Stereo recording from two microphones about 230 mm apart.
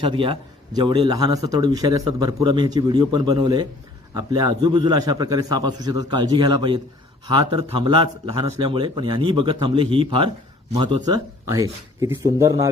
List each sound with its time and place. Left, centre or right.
0.0 s a man's voice: right